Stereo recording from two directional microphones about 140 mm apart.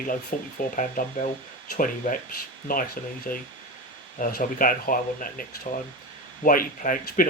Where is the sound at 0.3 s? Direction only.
75° left (ahead or behind).